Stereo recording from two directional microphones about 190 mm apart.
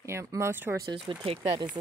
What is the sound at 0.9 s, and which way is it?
Speech, 30° right (ahead or behind).